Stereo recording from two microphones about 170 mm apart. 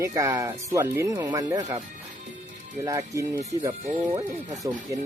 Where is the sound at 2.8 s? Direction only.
20° right (ahead or behind).